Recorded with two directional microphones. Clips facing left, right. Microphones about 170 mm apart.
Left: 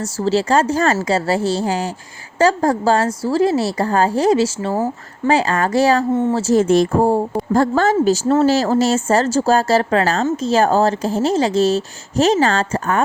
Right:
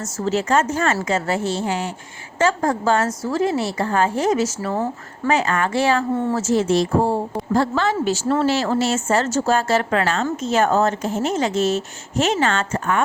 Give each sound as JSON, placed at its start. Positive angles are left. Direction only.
{"t": 0.0, "sound": "a woman's voice", "side_deg": 30}
{"t": 6.5, "sound": "a woman's voice", "side_deg": 50}